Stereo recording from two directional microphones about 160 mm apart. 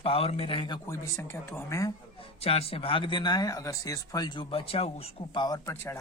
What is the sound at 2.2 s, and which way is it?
Speech, 40° left (ahead or behind).